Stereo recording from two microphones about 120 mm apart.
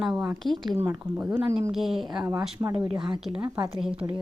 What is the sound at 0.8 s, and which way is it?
A woman's voice, 15° right (ahead or behind).